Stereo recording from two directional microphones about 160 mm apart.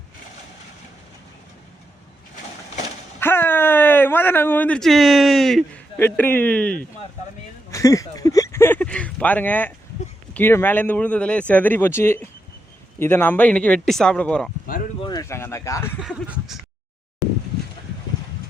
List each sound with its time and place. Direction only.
3.2 s speech: 15° left (ahead or behind)
7.7 s speech: 20° left (ahead or behind)
15.0 s speech: 25° left (ahead or behind)
16.0 s a sound: centre (ahead or behind)